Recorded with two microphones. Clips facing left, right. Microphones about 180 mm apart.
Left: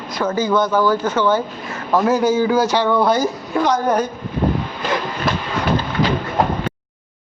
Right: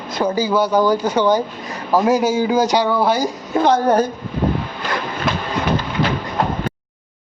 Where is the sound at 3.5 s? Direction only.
30° right (ahead or behind).